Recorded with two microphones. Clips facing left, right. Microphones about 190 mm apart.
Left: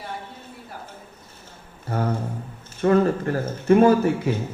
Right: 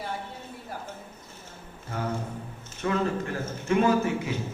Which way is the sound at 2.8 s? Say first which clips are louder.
Left 8 dB; 45° left (ahead or behind).